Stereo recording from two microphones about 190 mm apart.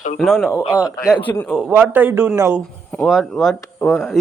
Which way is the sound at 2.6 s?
5° left (ahead or behind).